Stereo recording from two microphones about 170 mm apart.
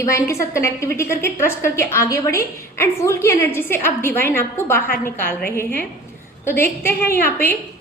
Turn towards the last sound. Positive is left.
turn(degrees=10)  # may be behind; listen again after turning